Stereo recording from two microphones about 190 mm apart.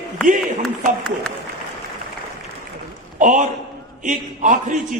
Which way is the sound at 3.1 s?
40° right (ahead or behind).